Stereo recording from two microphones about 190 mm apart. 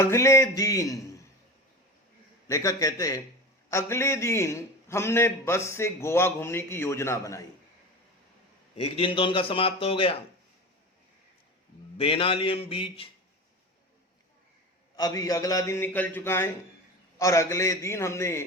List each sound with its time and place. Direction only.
0.0 s a man's voice: 15° left (ahead or behind)
2.5 s a man's voice: 15° left (ahead or behind)
8.8 s a man's voice: 30° left (ahead or behind)
11.9 s a man's voice: 30° left (ahead or behind)
14.9 s a man's voice: 20° left (ahead or behind)